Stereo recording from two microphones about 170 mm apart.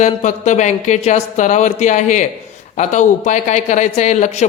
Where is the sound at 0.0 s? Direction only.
45° left (ahead or behind).